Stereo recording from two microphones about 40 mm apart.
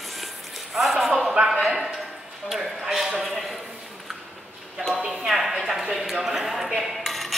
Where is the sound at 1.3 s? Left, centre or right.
Centre.